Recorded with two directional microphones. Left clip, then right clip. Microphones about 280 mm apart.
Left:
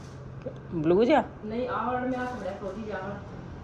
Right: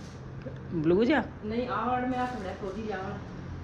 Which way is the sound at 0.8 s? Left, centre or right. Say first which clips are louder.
Left 3 dB; centre.